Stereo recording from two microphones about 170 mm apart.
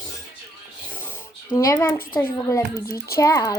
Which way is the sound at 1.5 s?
20° left (ahead or behind).